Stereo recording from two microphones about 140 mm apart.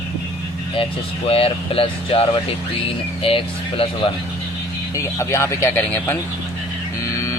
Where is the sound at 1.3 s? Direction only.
45° left (ahead or behind).